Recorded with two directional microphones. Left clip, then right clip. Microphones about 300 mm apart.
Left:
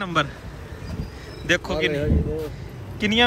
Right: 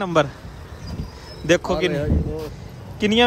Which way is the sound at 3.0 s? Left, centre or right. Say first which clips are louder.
Right 2 dB; centre.